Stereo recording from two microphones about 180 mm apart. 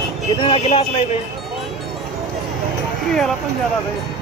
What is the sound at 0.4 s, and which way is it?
Speech, 30° left (ahead or behind).